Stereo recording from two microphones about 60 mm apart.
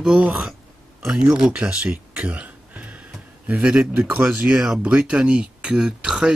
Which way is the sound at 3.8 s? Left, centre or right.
Right.